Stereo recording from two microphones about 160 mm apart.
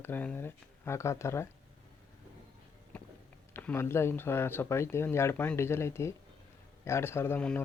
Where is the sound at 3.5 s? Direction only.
10° left (ahead or behind).